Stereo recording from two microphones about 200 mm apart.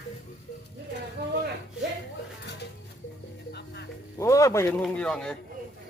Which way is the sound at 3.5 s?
55° left (ahead or behind).